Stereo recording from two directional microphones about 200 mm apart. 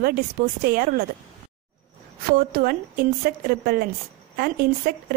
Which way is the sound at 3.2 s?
50° right (ahead or behind).